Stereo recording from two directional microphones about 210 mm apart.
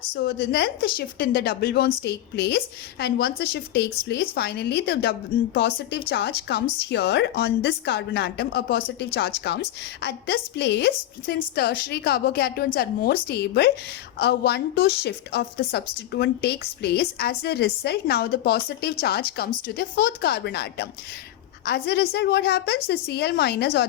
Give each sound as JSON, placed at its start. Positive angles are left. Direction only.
{"t": 0.1, "sound": "a woman's voice", "side_deg": 55}